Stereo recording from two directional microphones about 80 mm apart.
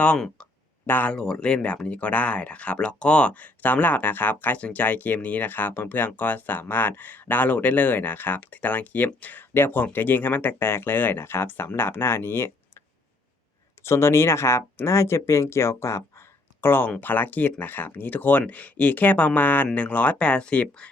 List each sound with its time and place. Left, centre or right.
0.9 s speech: left
1.1 s speech: centre; by 12.8 s left
13.8 s speech: left; by 20.9 s centre